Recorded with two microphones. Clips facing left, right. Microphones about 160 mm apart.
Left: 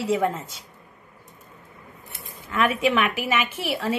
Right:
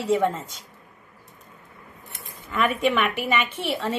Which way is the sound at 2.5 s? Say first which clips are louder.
Left 1 dB; centre (ahead or behind).